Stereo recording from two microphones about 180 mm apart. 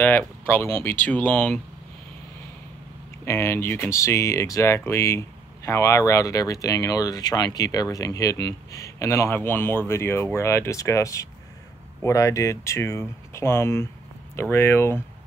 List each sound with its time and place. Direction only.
0.0 s speech: 10° left (ahead or behind)
3.3 s speech: 15° left (ahead or behind)